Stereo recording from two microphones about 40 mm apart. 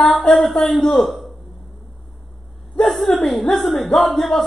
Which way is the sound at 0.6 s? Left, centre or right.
Centre.